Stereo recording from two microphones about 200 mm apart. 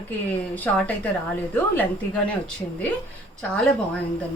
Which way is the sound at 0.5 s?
5° left (ahead or behind).